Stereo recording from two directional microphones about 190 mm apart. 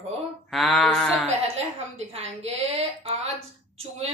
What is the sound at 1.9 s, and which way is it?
Speech, 35° right (ahead or behind).